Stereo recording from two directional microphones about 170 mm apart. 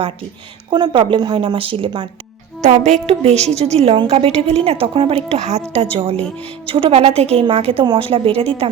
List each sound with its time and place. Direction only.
0.7 s speech: 30° right (ahead or behind)
2.6 s a woman's voice: 40° right (ahead or behind)